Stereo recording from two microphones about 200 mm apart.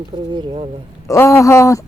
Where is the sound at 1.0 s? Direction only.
15° left (ahead or behind).